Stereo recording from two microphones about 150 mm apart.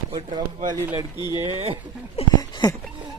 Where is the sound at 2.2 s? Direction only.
40° left (ahead or behind).